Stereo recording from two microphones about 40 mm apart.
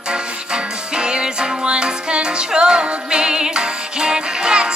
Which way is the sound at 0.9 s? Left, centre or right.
Right.